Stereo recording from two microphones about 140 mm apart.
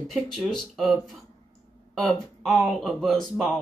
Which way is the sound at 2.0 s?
5° left (ahead or behind).